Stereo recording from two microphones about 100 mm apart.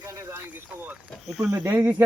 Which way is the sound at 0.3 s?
20° right (ahead or behind).